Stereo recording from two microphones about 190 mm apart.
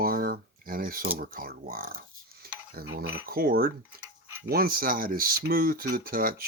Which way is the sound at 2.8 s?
75° right (ahead or behind).